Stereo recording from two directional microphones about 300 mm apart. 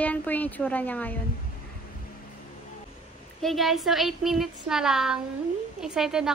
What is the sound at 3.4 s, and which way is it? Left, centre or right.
Speech, centre.